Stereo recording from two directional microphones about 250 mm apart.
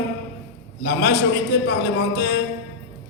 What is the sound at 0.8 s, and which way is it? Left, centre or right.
Speech, left.